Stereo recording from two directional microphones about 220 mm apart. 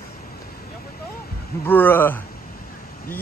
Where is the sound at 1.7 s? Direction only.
10° left (ahead or behind).